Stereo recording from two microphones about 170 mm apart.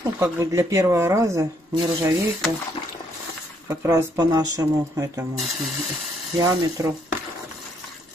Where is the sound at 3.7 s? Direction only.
15° right (ahead or behind).